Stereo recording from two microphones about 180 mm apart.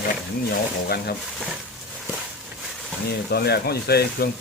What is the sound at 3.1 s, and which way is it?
Speech, 60° left (ahead or behind).